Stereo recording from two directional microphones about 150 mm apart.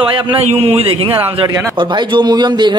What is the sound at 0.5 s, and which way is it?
A man's voice, 40° right (ahead or behind).